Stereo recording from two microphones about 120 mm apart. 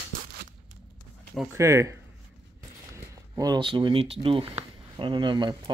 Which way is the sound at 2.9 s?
30° right (ahead or behind).